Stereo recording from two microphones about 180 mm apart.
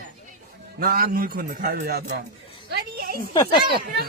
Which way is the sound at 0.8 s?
55° right (ahead or behind).